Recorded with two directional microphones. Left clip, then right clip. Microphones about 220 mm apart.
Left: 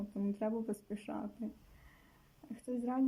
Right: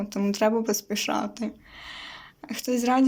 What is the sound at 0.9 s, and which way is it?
Speech, centre (ahead or behind).